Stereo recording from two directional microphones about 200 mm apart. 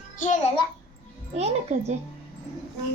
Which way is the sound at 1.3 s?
30° right (ahead or behind).